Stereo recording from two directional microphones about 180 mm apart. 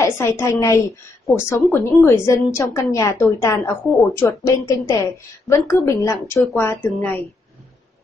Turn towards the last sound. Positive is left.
turn(degrees=10)  # may be behind; listen again after turning